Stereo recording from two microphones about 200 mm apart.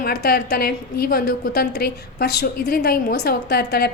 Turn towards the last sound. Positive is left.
turn(degrees=55)  # may be behind; listen again after turning